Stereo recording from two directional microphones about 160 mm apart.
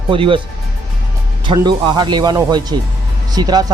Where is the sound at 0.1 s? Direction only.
35° right (ahead or behind).